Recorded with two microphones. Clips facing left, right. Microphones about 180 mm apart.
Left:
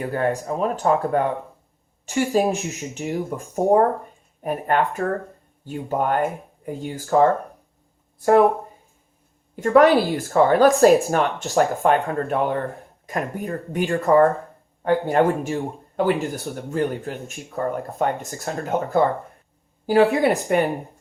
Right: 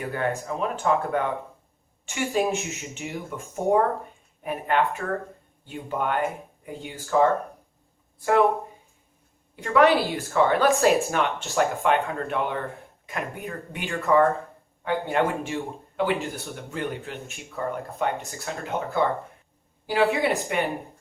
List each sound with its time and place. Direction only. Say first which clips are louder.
0.0 s speech: left 5 dB; 35° left (ahead or behind)
9.6 s speech: left 5 dB; 40° left (ahead or behind)
10.0 s speech: left 5 dB; centre (ahead or behind)
10.2 s speech: left 5 dB; 40° left (ahead or behind)
20.5 s a woman's voice: left 7 dB; 45° left (ahead or behind)